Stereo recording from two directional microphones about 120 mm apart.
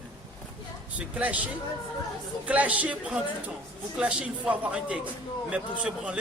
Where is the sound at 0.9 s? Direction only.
10° right (ahead or behind).